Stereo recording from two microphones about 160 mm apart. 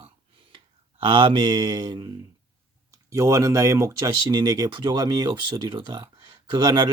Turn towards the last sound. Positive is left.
turn(degrees=-25)  # may be behind; listen again after turning